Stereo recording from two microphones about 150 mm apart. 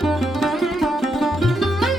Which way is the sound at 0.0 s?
Centre (ahead or behind).